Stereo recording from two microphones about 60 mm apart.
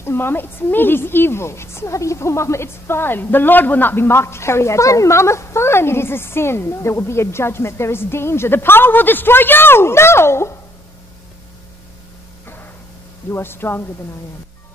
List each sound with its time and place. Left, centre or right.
0.0 s a woman's voice: left
13.3 s speech: left